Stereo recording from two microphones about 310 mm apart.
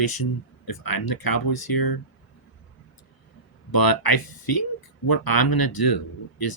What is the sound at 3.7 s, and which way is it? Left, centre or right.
Speech, left.